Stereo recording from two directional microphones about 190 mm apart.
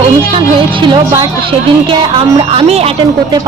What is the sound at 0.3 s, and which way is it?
Speech, 25° right (ahead or behind).